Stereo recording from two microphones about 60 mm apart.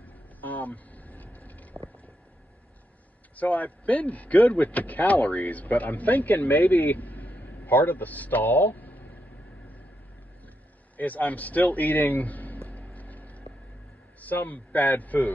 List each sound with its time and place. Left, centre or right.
0.0 s vehicle: left
3.3 s speech: left
11.0 s a sound: left
14.2 s speech: left